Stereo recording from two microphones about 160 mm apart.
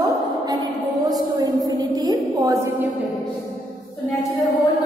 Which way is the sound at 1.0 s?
25° right (ahead or behind).